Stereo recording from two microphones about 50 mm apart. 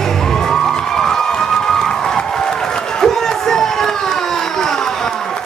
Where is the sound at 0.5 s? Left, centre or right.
Centre.